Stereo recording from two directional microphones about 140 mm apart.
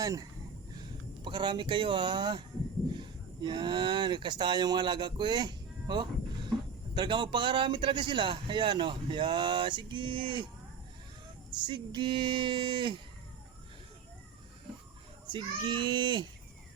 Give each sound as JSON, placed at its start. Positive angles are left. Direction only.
{"t": 0.0, "sound": "a man's voice", "side_deg": -25}
{"t": 11.6, "sound": "a man's voice", "side_deg": -35}
{"t": 15.3, "sound": "a man's voice", "side_deg": -35}